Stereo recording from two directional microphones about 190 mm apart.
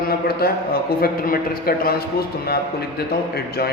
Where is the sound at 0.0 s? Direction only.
55° left (ahead or behind).